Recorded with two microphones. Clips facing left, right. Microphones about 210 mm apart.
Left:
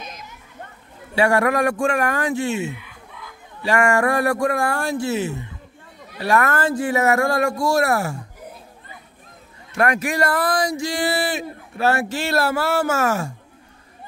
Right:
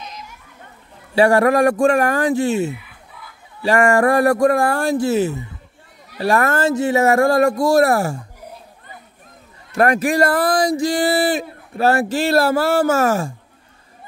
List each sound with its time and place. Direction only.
1.1 s speech: 35° right (ahead or behind)
9.8 s speech: 35° right (ahead or behind)